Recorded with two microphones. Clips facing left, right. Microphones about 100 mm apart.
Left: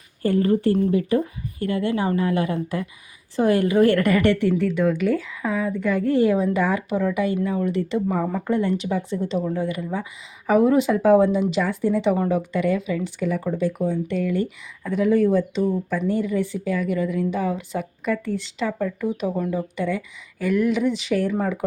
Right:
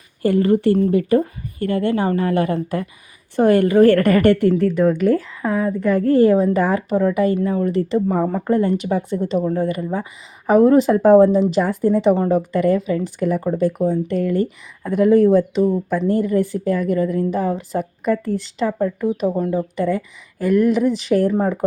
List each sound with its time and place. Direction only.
0.2 s a woman's voice: 90° right
0.9 s a woman's voice: 55° right (ahead or behind); by 8.0 s 40° right (ahead or behind)
8.1 s speech: 25° right (ahead or behind)
8.4 s speech: 40° right (ahead or behind)
18.8 s speech: 30° right (ahead or behind)